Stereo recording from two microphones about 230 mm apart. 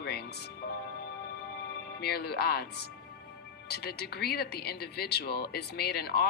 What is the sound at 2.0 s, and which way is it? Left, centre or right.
Speech, left.